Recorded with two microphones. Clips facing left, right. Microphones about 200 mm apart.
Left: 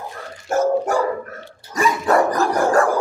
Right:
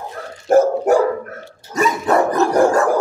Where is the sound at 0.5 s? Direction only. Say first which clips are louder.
Right 5 dB; 55° right (ahead or behind).